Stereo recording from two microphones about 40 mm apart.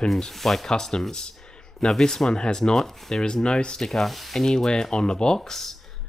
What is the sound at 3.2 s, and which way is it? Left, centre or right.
Speech, left.